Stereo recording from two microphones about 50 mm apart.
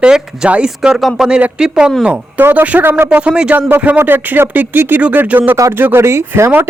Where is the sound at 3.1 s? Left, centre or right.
Right.